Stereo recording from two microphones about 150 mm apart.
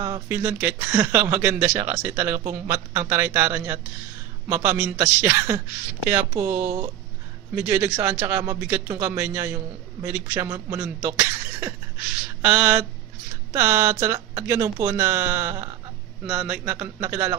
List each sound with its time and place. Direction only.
0.0 s a man's voice: 20° right (ahead or behind)
12.4 s a sound: 10° right (ahead or behind)
13.5 s speech: 20° right (ahead or behind)
16.2 s speech: 5° right (ahead or behind)